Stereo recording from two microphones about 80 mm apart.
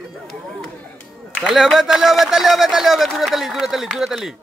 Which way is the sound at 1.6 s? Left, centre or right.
Centre.